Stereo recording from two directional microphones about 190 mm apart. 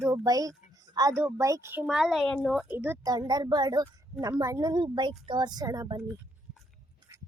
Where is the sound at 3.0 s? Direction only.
20° right (ahead or behind).